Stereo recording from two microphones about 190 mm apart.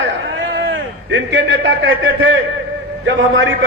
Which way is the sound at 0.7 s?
80° right.